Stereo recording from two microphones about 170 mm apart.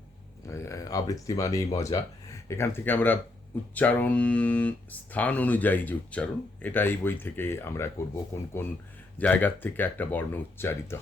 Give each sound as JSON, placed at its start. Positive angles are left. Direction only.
{"t": 0.5, "sound": "speech", "side_deg": 20}